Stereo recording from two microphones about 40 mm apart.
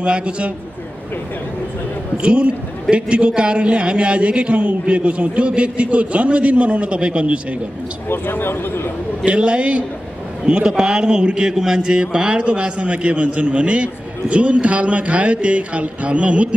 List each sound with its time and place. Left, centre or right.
0.0 s speech: right
2.2 s a man's voice: right
8.1 s speech: left
9.2 s a man's voice: right